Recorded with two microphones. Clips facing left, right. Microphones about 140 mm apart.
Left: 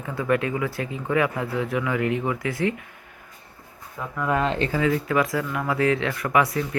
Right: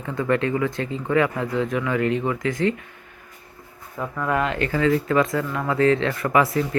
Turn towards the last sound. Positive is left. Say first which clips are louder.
# right 2 dB
turn(degrees=0)  # may be behind; listen again after turning